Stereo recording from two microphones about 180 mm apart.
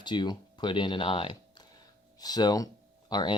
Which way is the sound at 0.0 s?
25° left (ahead or behind).